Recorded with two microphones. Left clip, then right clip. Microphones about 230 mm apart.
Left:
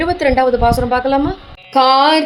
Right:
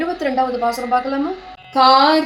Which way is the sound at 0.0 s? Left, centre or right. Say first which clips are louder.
Left 6 dB; left.